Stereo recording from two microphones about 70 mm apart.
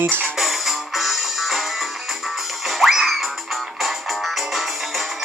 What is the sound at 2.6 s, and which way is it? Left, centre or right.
Music, centre.